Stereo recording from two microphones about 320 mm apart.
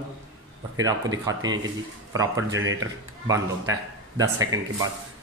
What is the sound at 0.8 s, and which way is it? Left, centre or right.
Speech, centre.